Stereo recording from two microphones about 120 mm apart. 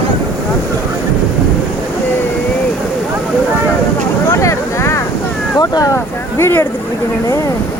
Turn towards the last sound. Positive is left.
turn(degrees=20)  # may be behind; listen again after turning